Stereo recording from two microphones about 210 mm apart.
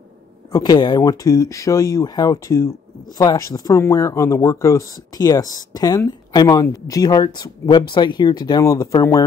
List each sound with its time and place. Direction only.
0.5 s speech: 15° left (ahead or behind)